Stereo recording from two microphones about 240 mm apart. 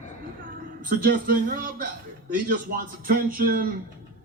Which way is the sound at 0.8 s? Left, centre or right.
Right.